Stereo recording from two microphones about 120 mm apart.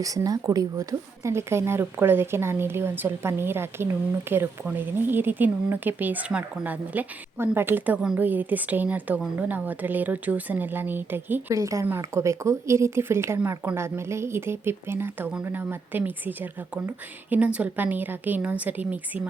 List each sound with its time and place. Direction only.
0.0 s speech: 30° right (ahead or behind); by 19.3 s 10° right (ahead or behind)